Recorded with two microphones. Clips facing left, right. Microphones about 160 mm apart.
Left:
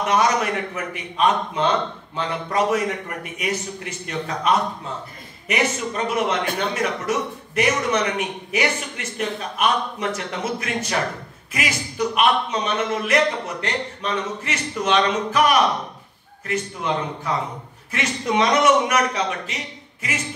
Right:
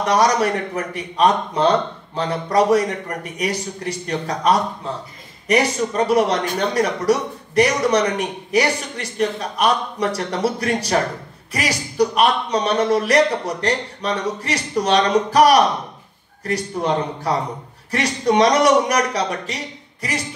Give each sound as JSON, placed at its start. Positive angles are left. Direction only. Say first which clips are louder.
{"t": 0.0, "sound": "a man's voice", "louder": "right 3 dB", "side_deg": -35}